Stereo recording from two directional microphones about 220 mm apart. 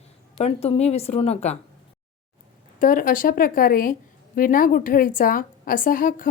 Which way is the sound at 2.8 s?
40° left (ahead or behind).